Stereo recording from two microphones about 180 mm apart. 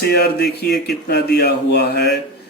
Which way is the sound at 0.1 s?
65° left (ahead or behind).